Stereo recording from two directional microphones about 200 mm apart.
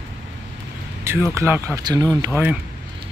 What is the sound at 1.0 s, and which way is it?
Speech, 10° right (ahead or behind).